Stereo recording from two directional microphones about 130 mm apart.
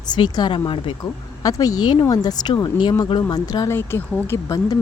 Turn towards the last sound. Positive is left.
turn(degrees=20)  # may be behind; listen again after turning